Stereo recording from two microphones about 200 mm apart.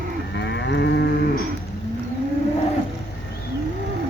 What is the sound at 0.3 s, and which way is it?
Moo, 60° left (ahead or behind).